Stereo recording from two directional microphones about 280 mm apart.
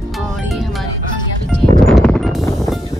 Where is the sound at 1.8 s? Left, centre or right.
Centre.